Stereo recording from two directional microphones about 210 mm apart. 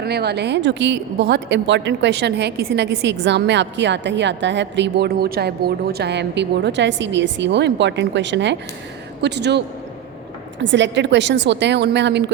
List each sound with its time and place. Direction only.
0.0 s a woman's voice: 50° right (ahead or behind)